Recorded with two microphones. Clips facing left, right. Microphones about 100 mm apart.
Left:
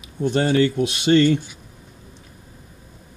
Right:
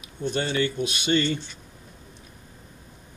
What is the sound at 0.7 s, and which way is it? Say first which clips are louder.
Speech: left 7 dB; 90° left.